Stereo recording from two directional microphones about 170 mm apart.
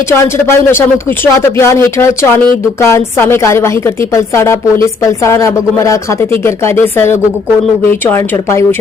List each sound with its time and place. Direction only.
0.1 s a woman's voice: 15° left (ahead or behind)